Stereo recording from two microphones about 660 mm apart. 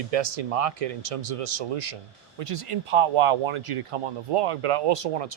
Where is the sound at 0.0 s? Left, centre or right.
Right.